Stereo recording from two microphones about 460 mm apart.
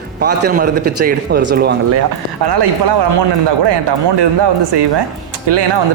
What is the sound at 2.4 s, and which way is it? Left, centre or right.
Speech, right.